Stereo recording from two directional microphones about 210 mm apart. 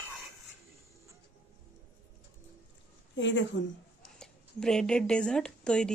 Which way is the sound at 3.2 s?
60° left (ahead or behind).